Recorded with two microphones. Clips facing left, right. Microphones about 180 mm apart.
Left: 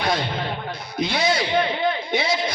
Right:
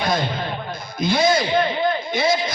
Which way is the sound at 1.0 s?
70° left (ahead or behind).